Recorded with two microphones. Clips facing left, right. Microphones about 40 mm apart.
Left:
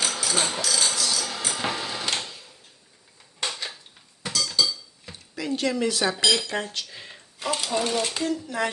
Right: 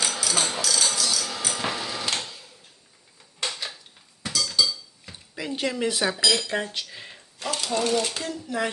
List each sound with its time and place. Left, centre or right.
0.0 s a sound: centre
4.2 s dishes: centre
5.4 s speech: centre
6.3 s speech: centre
7.1 s mechanisms: centre
7.5 s speech: centre